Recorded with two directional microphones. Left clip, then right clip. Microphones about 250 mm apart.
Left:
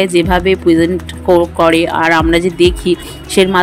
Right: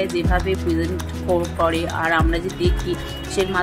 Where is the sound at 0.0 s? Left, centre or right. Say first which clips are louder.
Left 10 dB; left.